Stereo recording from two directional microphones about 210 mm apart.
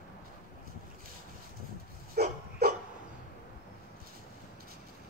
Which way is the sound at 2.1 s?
50° right (ahead or behind).